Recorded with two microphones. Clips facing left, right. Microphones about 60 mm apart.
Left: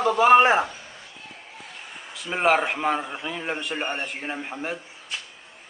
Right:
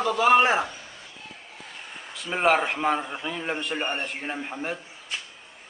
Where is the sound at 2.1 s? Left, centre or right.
Centre.